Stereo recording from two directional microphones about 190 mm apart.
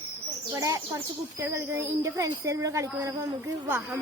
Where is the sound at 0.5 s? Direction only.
15° right (ahead or behind).